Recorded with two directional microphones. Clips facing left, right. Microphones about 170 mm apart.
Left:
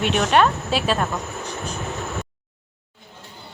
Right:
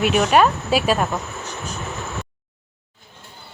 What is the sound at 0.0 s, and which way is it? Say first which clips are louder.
Speech: right 2 dB; 5° right (ahead or behind).